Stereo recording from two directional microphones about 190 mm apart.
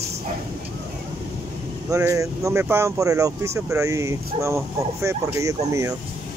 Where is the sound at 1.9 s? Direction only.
15° right (ahead or behind).